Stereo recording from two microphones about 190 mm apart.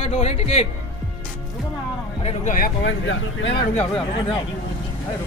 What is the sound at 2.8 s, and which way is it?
Speech, 70° left (ahead or behind).